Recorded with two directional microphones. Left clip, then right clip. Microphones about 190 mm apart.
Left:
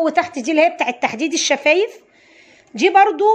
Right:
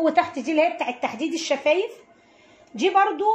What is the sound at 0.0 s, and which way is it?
A woman's voice, 30° left (ahead or behind).